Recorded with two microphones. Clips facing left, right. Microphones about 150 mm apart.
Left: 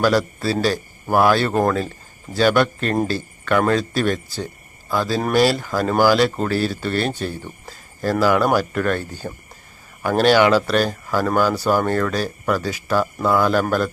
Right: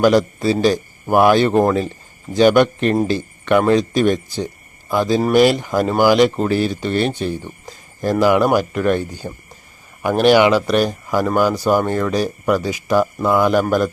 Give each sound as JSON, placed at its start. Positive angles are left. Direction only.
{"t": 0.0, "sound": "speech", "side_deg": -15}